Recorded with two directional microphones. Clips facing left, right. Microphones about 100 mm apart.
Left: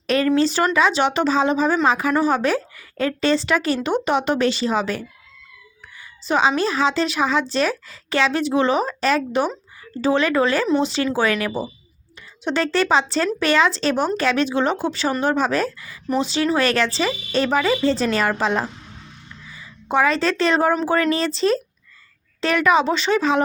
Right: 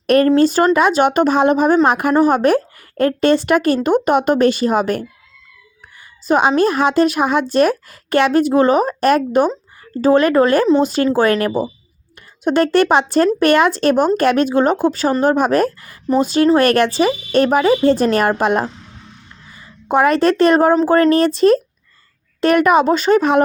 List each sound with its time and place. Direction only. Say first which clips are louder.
0.3 s speech: right 5 dB; 45° right (ahead or behind)
6.2 s a woman's voice: right 5 dB; 50° right (ahead or behind)